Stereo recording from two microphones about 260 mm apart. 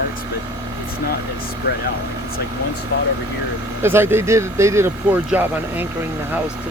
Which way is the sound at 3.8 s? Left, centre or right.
Centre.